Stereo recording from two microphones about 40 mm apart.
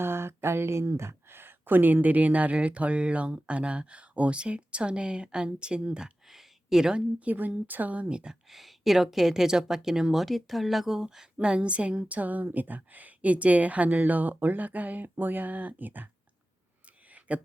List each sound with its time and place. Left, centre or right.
0.0 s speech: right
6.2 s a sound: centre
7.3 s speech: right
8.1 s speech: right
8.4 s speech: centre
10.9 s speech: centre
11.3 s speech: right
15.0 s speech: right
17.1 s a sound: right